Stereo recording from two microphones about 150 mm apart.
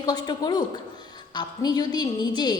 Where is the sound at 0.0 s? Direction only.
25° left (ahead or behind).